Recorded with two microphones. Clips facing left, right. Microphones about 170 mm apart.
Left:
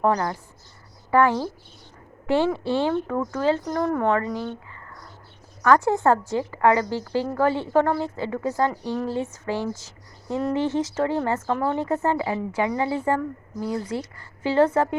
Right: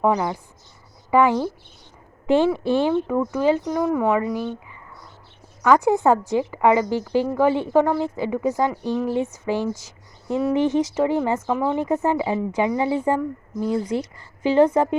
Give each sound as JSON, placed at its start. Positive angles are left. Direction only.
{"t": 0.0, "sound": "speech", "side_deg": -10}